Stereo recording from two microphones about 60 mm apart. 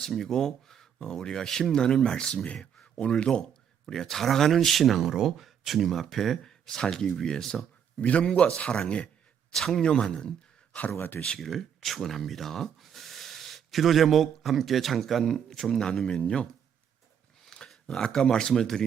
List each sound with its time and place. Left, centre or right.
0.0 s speech: centre
7.9 s a man's voice: left
9.5 s speech: centre
10.9 s speech: left
11.2 s speech: centre
17.7 s speech: centre